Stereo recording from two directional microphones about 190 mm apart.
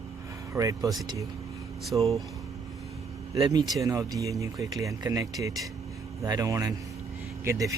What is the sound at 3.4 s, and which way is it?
Speech, 20° right (ahead or behind).